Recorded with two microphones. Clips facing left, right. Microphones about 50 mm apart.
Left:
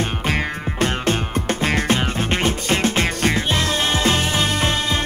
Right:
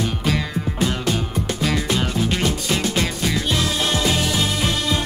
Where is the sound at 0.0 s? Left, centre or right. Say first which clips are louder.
Left 1 dB; left.